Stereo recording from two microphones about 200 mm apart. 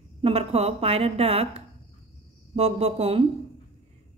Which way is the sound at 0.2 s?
30° right (ahead or behind).